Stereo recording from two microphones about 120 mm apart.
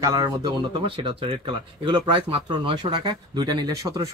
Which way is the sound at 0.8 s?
45° right (ahead or behind).